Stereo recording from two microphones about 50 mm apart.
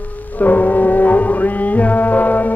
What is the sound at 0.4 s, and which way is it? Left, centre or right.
Music, left.